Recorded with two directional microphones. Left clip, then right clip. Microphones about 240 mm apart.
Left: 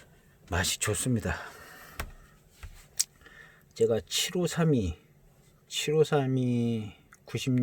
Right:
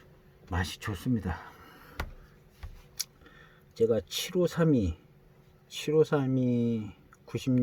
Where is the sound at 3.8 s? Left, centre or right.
Left.